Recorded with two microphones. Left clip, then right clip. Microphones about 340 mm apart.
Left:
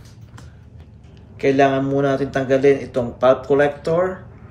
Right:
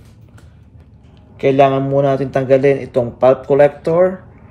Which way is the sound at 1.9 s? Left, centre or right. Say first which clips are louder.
Right 4 dB; centre.